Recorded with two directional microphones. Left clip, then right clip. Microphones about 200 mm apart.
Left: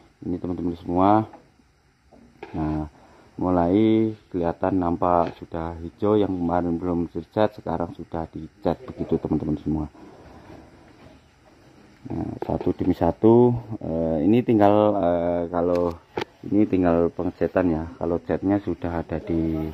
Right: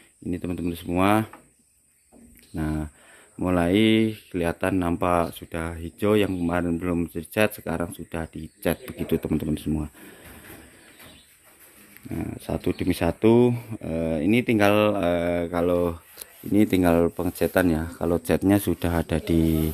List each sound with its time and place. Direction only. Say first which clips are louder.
0.4 s speech: left 1 dB; 25° right (ahead or behind)
0.8 s speech: left 3 dB; centre (ahead or behind)
2.5 s speech: left 2 dB; 15° right (ahead or behind)
3.7 s speech: left 1 dB; centre (ahead or behind)
4.7 s speech: left 3 dB; 20° right (ahead or behind)
7.2 s speech: left 1 dB; 25° right (ahead or behind)
12.6 s speech: left 2 dB; 5° left (ahead or behind)
13.5 s speech: left 2 dB; 5° right (ahead or behind)
13.8 s speech: left 3 dB; 10° left (ahead or behind)
15.3 s speech: left 1 dB; 30° right (ahead or behind)